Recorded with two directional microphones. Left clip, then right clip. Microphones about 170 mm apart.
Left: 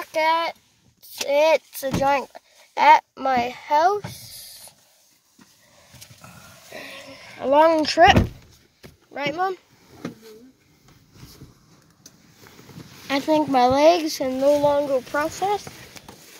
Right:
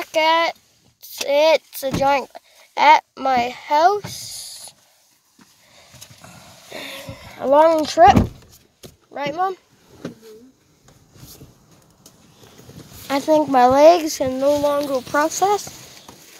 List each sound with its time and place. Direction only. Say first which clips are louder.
0.0 s speech: right 4 dB; 10° right (ahead or behind)
6.7 s a sound: right 5 dB; 25° right (ahead or behind)
7.7 s speech: right 3 dB; 5° right (ahead or behind)
9.1 s speech: right 1 dB; 15° right (ahead or behind)
13.3 s speech: right 4 dB; 15° right (ahead or behind)
14.2 s speech: left 3 dB; 5° right (ahead or behind)
14.9 s speech: right 3 dB; 20° right (ahead or behind)
15.2 s speech: right 5 dB; 35° right (ahead or behind)